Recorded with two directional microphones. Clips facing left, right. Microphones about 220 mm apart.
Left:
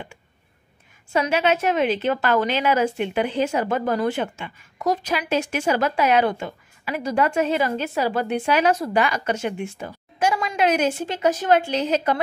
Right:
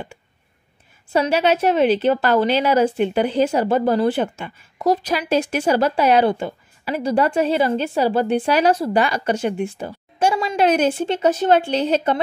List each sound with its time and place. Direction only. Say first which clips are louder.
1.1 s a woman's voice: right 3 dB; 35° right (ahead or behind)